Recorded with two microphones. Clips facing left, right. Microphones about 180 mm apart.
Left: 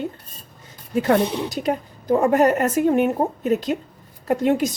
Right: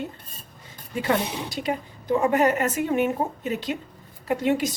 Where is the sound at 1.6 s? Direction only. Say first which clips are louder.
Left 3 dB; 40° left (ahead or behind).